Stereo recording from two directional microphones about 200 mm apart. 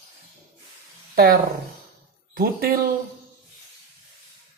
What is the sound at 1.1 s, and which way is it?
Speech, 45° right (ahead or behind).